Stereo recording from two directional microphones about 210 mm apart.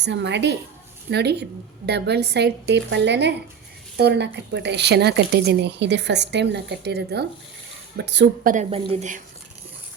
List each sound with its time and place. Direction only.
0.0 s a woman's voice: 55° right (ahead or behind)
8.9 s speech: 35° right (ahead or behind)